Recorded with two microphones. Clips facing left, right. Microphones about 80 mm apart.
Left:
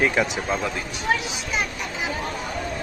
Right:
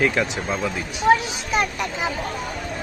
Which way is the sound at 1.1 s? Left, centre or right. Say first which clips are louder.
Right 6 dB; right.